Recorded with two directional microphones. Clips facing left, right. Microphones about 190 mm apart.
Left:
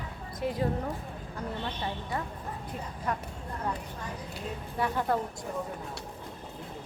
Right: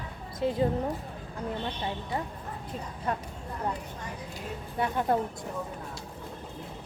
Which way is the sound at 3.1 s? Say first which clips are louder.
Right 1 dB; 25° right (ahead or behind).